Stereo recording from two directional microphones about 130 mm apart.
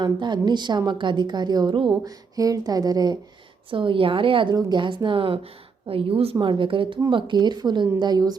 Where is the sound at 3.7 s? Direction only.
40° right (ahead or behind).